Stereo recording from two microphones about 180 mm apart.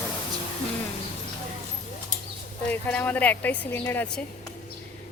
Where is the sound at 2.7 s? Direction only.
10° left (ahead or behind).